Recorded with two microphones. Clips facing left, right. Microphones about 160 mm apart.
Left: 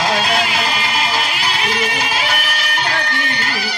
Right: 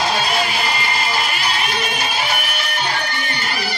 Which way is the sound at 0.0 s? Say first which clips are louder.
Left 2 dB; 90° left.